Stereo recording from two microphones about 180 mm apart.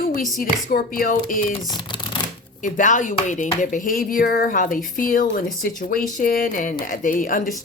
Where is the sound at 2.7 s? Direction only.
45° left (ahead or behind).